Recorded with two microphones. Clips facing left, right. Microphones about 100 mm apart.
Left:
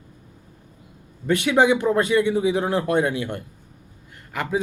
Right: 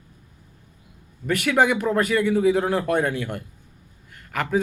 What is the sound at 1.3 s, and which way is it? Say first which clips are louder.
A man's voice: left 2 dB; 20° left (ahead or behind).